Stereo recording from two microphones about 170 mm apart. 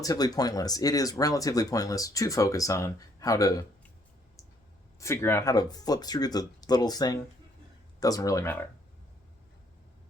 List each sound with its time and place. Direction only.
0.0 s speech: 20° left (ahead or behind)
4.9 s speech: 15° left (ahead or behind)